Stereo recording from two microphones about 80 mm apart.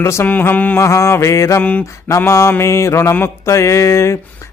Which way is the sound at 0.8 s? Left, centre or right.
Left.